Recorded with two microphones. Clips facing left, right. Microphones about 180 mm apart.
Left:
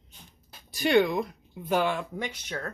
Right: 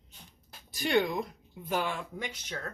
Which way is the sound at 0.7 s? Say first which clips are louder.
Left 5 dB; 70° left (ahead or behind).